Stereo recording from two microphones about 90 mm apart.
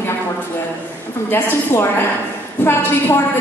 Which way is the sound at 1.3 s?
25° left (ahead or behind).